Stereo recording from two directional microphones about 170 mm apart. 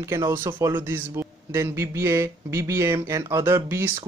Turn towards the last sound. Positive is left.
turn(degrees=-15)  # may be behind; listen again after turning